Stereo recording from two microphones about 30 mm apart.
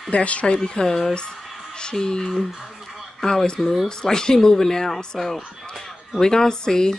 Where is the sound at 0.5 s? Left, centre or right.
Left.